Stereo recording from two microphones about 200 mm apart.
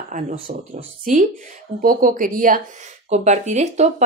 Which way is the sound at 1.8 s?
45° right (ahead or behind).